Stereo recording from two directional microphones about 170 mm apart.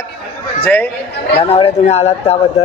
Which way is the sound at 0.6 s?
10° left (ahead or behind).